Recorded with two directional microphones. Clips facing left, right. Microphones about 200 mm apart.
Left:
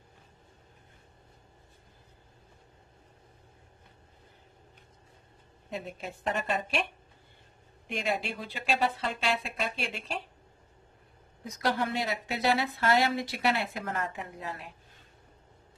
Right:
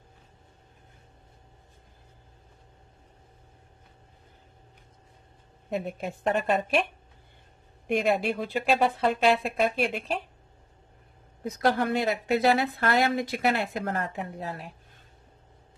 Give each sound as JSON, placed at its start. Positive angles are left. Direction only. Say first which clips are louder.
{"t": 5.7, "sound": "speech", "louder": "right 7 dB", "side_deg": -55}
{"t": 7.9, "sound": "speech", "louder": "right 8 dB", "side_deg": -55}
{"t": 11.4, "sound": "speech", "louder": "right 5 dB", "side_deg": -55}